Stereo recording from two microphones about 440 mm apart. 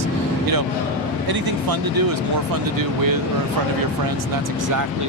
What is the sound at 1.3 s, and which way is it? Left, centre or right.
Speech, right.